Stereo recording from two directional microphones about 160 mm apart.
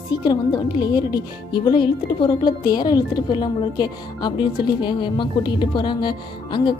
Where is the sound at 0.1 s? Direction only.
25° left (ahead or behind).